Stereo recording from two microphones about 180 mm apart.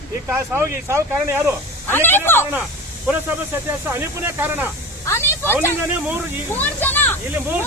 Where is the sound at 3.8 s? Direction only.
10° right (ahead or behind).